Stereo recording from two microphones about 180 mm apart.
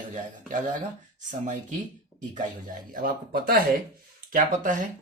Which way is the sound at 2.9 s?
55° right (ahead or behind).